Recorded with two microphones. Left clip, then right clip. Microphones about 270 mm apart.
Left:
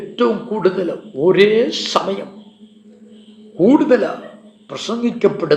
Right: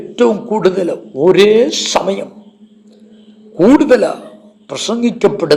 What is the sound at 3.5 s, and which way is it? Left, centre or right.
A man's voice, right.